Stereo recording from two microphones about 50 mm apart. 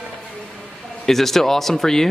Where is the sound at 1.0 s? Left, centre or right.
Centre.